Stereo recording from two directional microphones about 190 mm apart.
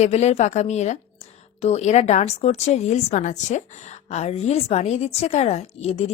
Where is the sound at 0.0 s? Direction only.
35° left (ahead or behind).